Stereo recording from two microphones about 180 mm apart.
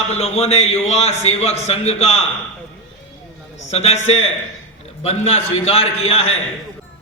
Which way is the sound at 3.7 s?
35° left (ahead or behind).